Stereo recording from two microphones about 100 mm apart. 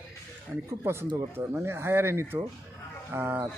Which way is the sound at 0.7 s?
25° right (ahead or behind).